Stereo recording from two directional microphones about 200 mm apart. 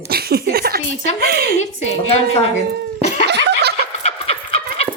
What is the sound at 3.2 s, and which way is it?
Snicker, 55° right (ahead or behind).